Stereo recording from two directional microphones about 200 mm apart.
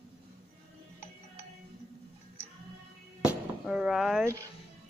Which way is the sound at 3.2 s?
5° right (ahead or behind).